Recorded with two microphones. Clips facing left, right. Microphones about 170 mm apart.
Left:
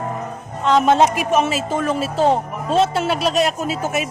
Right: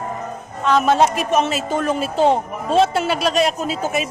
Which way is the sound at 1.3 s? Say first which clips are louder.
Even; 5° left (ahead or behind).